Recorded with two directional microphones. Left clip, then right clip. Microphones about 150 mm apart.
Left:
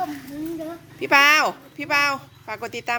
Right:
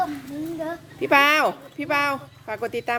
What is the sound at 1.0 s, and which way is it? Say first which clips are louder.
Speech: left 2 dB; 25° right (ahead or behind).